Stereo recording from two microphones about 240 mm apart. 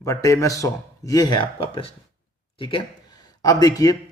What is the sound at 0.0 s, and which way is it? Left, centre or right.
A man's voice, centre.